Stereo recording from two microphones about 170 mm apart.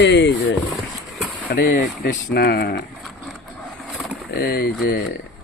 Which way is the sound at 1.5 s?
65° left (ahead or behind).